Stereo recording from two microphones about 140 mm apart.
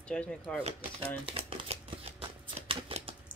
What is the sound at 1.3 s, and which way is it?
Shuffling cards, 40° right (ahead or behind).